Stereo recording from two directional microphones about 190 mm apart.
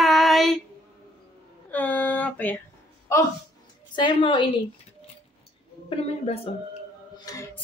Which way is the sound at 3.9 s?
25° left (ahead or behind).